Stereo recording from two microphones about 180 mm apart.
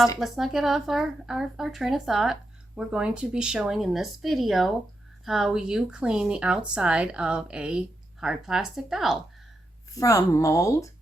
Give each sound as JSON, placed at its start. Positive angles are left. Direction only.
{"t": 0.2, "sound": "a woman's voice", "side_deg": 0}
{"t": 9.9, "sound": "speech", "side_deg": 20}